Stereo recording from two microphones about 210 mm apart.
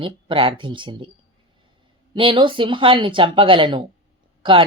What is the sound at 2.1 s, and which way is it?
Speech, 25° right (ahead or behind).